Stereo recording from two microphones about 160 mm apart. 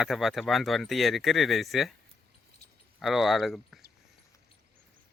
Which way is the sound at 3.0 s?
Centre (ahead or behind).